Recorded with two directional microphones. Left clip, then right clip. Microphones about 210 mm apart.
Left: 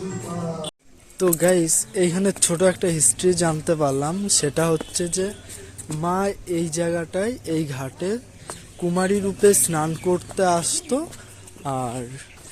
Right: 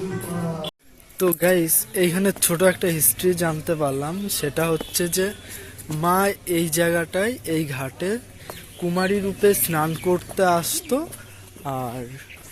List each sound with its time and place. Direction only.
1.2 s speech: 10° left (ahead or behind)
4.8 s speech: centre (ahead or behind)